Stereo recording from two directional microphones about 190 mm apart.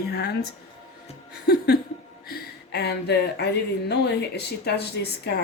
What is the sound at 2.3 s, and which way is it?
Speech, 55° left (ahead or behind).